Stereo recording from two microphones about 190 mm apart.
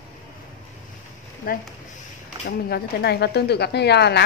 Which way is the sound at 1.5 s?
50° left (ahead or behind).